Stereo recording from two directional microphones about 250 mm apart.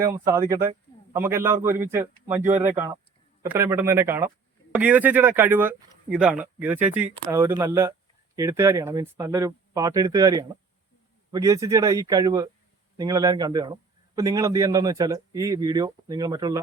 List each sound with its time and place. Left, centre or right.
0.0 s speech: centre